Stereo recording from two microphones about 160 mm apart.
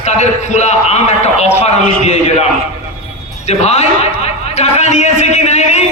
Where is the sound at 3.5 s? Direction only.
40° left (ahead or behind).